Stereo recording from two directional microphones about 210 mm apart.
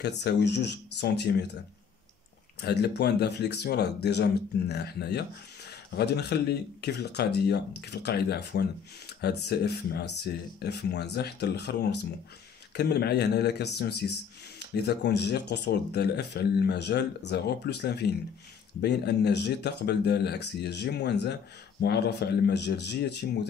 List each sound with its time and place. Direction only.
0.0 s speech: 55° left (ahead or behind)
2.6 s speech: 50° left (ahead or behind)